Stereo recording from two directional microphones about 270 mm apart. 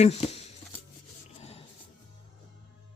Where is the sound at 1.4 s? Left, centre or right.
Left.